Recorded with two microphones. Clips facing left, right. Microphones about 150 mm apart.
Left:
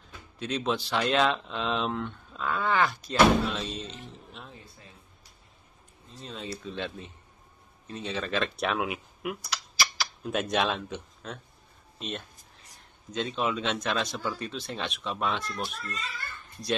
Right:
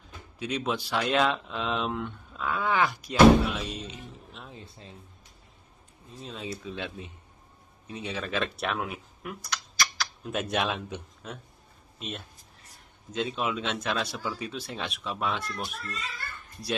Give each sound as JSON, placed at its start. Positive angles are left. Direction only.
{"t": 0.4, "sound": "speech", "side_deg": -10}
{"t": 4.5, "sound": "a sound", "side_deg": -20}
{"t": 6.2, "sound": "speech", "side_deg": -5}
{"t": 13.1, "sound": "speech", "side_deg": -5}